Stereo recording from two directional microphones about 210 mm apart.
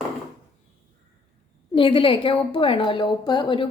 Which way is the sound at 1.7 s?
25° left (ahead or behind).